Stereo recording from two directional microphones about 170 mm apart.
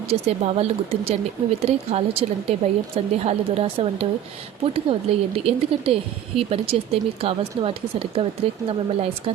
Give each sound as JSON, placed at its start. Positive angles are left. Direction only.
{"t": 0.1, "sound": "speech", "side_deg": -40}